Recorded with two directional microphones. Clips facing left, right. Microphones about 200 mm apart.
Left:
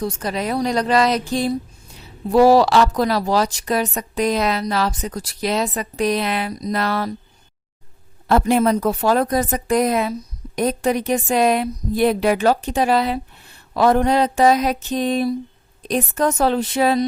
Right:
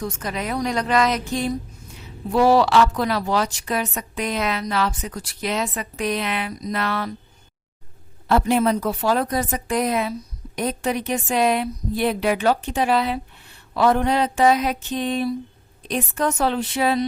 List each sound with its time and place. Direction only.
0.0 s a woman's voice: 35° left (ahead or behind)
8.3 s a woman's voice: 45° left (ahead or behind)